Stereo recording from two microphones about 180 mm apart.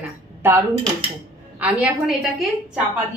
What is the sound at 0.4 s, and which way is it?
A woman's voice, 10° right (ahead or behind).